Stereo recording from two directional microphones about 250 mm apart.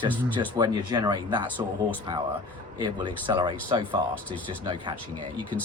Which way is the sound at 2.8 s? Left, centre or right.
Centre.